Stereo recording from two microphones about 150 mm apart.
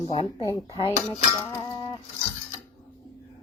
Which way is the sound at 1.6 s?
30° left (ahead or behind).